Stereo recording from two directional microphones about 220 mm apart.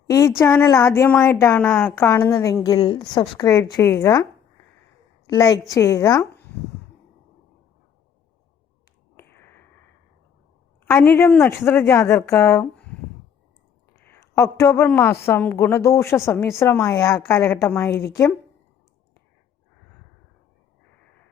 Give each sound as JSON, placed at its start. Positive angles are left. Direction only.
{"t": 0.1, "sound": "a woman's voice", "side_deg": 15}
{"t": 5.3, "sound": "a woman's voice", "side_deg": 15}
{"t": 9.1, "sound": "a sound", "side_deg": 10}
{"t": 10.8, "sound": "a woman's voice", "side_deg": 10}
{"t": 14.0, "sound": "a woman's voice", "side_deg": 10}